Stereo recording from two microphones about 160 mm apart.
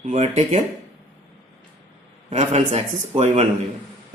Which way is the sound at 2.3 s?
45° right (ahead or behind).